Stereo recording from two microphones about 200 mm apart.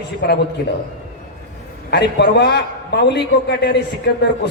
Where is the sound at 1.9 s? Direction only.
60° left (ahead or behind).